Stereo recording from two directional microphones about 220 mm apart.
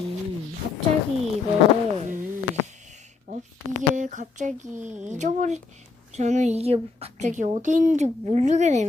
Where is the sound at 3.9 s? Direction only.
35° right (ahead or behind).